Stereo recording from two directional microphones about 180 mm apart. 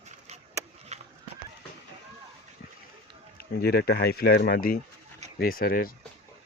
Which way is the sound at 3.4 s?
65° left (ahead or behind).